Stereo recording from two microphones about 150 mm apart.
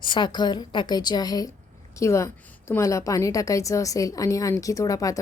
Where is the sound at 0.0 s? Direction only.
30° left (ahead or behind).